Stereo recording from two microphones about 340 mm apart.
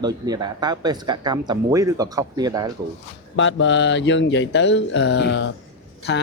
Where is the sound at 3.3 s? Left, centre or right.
Left.